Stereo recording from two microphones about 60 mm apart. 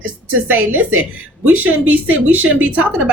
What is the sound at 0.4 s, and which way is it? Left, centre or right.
A woman's voice, right.